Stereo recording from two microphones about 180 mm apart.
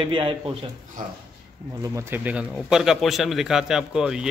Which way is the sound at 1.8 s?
15° right (ahead or behind).